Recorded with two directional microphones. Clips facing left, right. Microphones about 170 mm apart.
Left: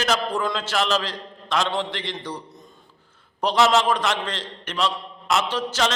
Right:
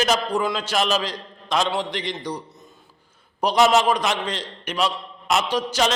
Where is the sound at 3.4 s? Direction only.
15° right (ahead or behind).